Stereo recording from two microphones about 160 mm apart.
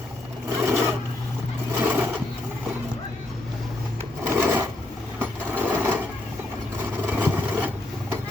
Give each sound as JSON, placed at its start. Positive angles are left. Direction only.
{"t": 0.5, "sound": "a sound", "side_deg": -15}
{"t": 4.3, "sound": "filing", "side_deg": -10}
{"t": 5.2, "sound": "sewing machine", "side_deg": -10}
{"t": 7.0, "sound": "vehicle", "side_deg": -10}